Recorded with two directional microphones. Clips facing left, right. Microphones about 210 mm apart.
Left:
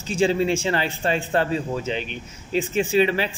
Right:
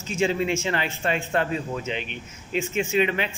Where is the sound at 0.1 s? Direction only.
35° left (ahead or behind).